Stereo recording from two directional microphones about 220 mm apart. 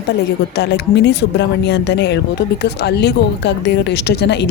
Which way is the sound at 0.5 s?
50° left (ahead or behind).